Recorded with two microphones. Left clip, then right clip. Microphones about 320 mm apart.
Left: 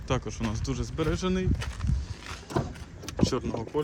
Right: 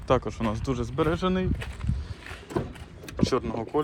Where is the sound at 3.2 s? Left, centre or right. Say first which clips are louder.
Right 3 dB; centre.